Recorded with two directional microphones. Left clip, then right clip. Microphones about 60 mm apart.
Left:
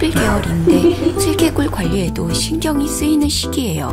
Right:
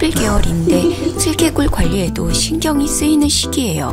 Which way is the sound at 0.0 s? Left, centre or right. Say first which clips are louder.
Even; right.